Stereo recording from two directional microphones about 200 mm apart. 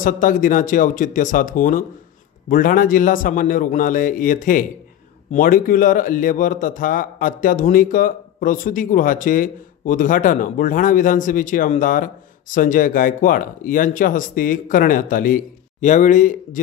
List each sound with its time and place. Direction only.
0.0 s a man's voice: 40° left (ahead or behind)